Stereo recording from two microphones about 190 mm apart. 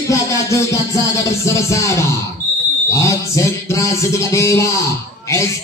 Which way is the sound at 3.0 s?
15° left (ahead or behind).